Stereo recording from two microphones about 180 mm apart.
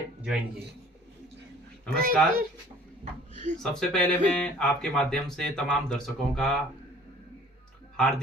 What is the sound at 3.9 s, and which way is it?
Speech, 5° left (ahead or behind).